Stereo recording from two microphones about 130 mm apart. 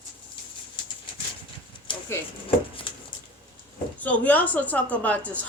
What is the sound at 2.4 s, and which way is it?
Speech, 45° left (ahead or behind).